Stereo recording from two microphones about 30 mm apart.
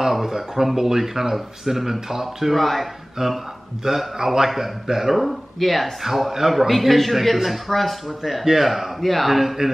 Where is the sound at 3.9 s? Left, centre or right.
Centre.